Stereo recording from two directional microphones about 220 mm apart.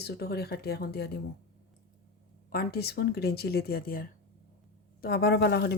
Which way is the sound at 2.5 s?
45° left (ahead or behind).